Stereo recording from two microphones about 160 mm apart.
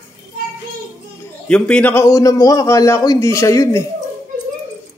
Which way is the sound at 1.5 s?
10° left (ahead or behind).